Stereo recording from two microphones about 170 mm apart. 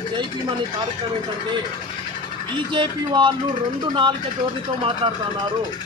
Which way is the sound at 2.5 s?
30° right (ahead or behind).